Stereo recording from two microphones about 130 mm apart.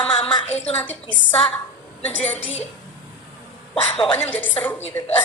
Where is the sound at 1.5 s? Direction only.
10° left (ahead or behind).